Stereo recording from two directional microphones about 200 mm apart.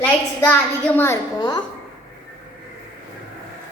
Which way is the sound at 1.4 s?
20° left (ahead or behind).